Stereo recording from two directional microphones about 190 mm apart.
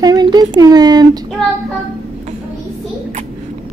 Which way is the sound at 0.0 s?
20° right (ahead or behind).